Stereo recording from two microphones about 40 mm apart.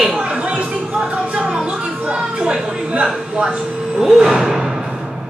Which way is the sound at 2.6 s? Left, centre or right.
Right.